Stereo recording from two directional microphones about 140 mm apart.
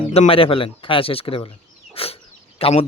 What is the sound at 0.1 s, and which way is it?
Speech, 45° left (ahead or behind).